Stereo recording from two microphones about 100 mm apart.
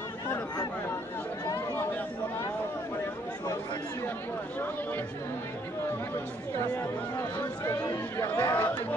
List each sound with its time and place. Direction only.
7.3 s speech: 25° left (ahead or behind)
8.5 s speech: 35° left (ahead or behind)